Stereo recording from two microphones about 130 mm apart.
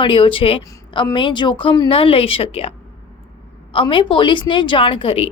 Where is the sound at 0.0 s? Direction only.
40° left (ahead or behind).